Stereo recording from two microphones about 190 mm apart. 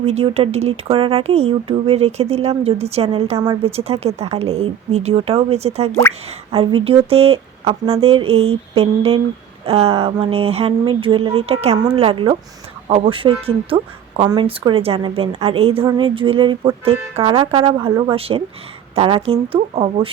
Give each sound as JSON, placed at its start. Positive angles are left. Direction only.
{"t": 0.0, "sound": "speech", "side_deg": -35}